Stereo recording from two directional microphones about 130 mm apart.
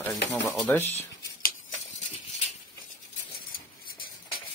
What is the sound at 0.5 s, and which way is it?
Speech, 15° left (ahead or behind).